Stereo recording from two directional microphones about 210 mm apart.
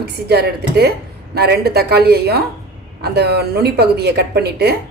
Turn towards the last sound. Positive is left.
turn(degrees=-50)  # may be behind; listen again after turning